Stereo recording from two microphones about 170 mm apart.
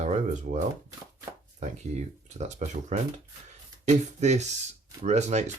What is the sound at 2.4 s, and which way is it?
Speech, 40° right (ahead or behind).